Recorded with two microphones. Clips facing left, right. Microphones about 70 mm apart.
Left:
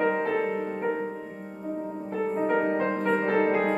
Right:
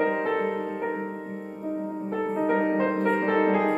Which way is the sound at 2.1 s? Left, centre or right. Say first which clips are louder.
Right 1 dB; right.